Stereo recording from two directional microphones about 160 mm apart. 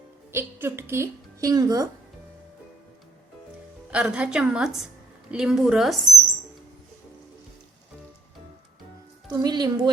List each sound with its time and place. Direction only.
0.3 s a woman's voice: 15° right (ahead or behind)
3.9 s a woman's voice: 5° right (ahead or behind)
9.3 s a woman's voice: 25° right (ahead or behind)